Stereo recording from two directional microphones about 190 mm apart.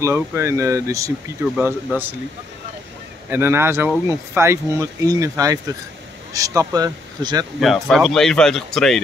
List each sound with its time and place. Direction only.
0.0 s speech: 15° right (ahead or behind)
3.3 s speech: 10° right (ahead or behind)
7.6 s speech: centre (ahead or behind)